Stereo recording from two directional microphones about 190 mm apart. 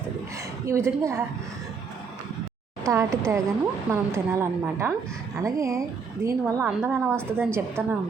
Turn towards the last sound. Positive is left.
turn(degrees=-10)  # may be behind; listen again after turning